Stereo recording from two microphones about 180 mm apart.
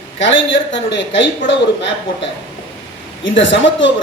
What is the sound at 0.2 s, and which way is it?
A man's voice, 90° left.